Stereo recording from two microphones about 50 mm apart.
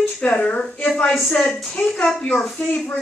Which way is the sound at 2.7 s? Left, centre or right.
Left.